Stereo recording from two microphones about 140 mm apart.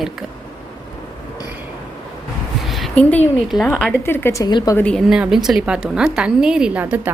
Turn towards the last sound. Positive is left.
turn(degrees=-10)  # may be behind; listen again after turning